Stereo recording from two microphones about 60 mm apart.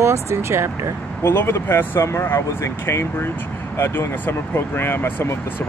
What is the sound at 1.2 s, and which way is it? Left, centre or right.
Speech, left.